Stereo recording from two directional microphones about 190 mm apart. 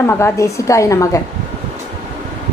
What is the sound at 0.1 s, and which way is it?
A woman's voice, 15° left (ahead or behind).